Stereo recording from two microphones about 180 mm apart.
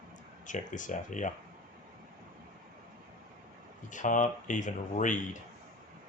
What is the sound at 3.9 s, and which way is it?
Speech, 45° left (ahead or behind).